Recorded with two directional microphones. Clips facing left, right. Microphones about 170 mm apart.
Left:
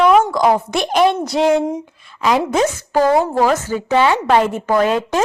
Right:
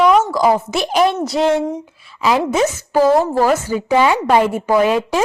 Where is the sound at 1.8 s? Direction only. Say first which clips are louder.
Even; 5° right (ahead or behind).